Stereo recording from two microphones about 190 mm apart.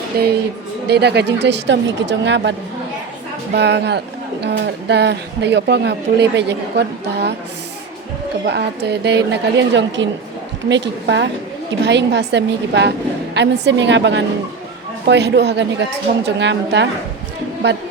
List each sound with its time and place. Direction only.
0.1 s speech: 55° right (ahead or behind)
8.4 s a woman's voice: 60° right (ahead or behind)